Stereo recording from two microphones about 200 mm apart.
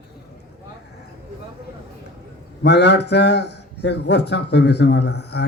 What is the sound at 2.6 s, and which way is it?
A man's voice, 60° left (ahead or behind).